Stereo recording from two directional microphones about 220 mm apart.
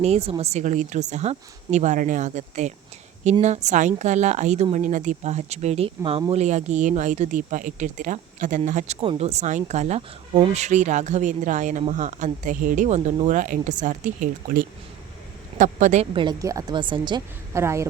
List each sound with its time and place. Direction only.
0.0 s speech: 30° right (ahead or behind)
16.1 s a woman's voice: 15° right (ahead or behind)